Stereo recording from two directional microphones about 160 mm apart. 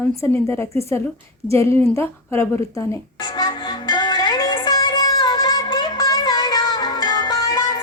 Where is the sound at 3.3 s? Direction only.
25° left (ahead or behind).